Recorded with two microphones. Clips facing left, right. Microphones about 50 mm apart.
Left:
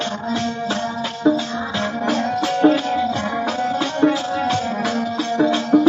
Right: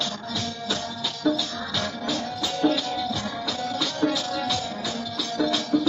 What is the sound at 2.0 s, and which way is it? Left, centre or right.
Music, left.